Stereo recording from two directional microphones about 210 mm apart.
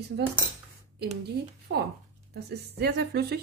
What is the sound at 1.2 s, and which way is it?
A woman's voice, 50° right (ahead or behind).